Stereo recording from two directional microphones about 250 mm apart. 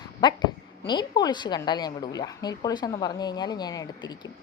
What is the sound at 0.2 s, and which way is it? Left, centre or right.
A woman's voice, centre.